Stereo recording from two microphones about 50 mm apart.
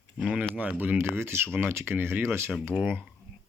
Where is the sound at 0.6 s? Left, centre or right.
Right.